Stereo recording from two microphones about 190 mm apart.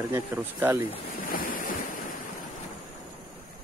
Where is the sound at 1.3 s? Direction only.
45° left (ahead or behind).